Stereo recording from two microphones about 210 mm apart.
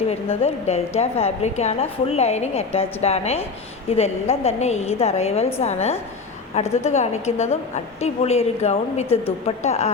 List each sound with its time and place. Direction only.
0.1 s a woman's voice: 30° left (ahead or behind)